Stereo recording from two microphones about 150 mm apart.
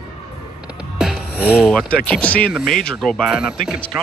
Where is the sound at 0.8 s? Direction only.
5° right (ahead or behind).